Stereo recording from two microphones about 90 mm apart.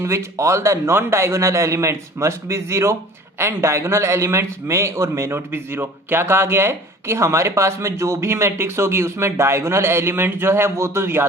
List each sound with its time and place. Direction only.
0.0 s a man's voice: 30° right (ahead or behind)